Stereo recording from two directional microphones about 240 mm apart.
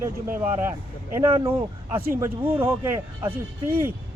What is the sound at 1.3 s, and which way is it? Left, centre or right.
Speech, centre.